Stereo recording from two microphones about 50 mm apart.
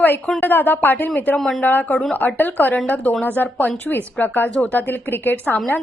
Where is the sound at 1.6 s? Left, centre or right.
Left.